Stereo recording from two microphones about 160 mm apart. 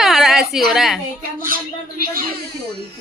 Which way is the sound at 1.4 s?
60° right (ahead or behind).